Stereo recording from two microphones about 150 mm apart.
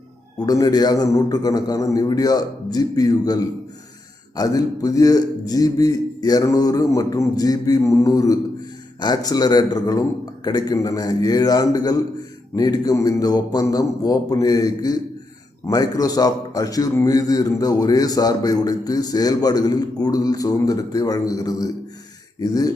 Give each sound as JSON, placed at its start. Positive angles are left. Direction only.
{"t": 0.3, "sound": "a man's voice", "side_deg": 25}